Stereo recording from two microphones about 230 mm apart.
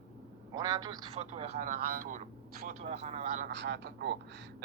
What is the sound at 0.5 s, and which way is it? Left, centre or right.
A man's voice, centre.